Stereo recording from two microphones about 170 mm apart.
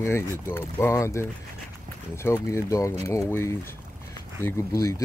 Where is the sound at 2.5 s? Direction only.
20° left (ahead or behind).